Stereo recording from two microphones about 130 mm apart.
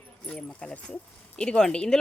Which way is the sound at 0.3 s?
10° left (ahead or behind).